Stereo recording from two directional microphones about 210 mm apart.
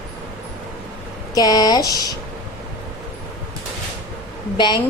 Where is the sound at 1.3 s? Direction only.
15° left (ahead or behind).